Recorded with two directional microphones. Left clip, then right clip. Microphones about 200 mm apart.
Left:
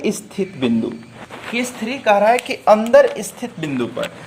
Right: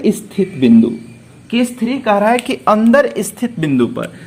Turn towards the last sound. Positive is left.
turn(degrees=-30)  # may be behind; listen again after turning